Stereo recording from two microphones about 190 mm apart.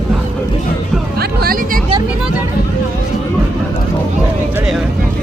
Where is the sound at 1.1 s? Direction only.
55° right (ahead or behind).